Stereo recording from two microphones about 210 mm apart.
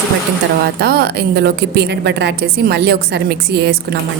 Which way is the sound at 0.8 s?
50° right (ahead or behind).